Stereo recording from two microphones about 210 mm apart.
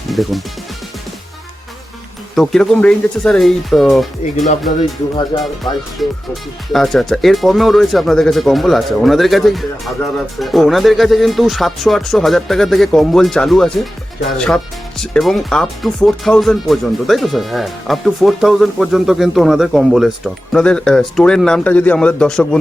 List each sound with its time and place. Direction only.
0.1 s speech: centre (ahead or behind)
2.3 s speech: centre (ahead or behind)
5.3 s speech: 25° left (ahead or behind)
6.0 s speech: centre (ahead or behind)